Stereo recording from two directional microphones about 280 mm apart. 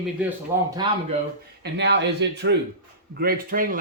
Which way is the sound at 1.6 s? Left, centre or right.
Right.